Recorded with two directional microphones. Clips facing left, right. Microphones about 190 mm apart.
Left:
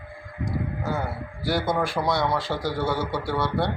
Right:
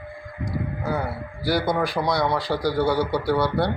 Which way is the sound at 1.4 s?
Centre (ahead or behind).